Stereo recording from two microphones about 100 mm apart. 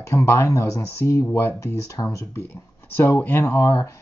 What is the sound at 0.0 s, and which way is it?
Speech, 30° left (ahead or behind).